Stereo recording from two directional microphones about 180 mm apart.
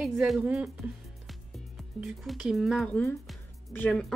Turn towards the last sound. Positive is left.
turn(degrees=5)  # may be behind; listen again after turning